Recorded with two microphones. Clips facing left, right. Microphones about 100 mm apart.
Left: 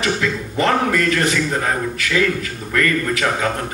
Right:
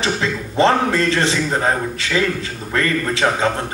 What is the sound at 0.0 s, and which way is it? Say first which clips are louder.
A man's voice: even; 30° right (ahead or behind).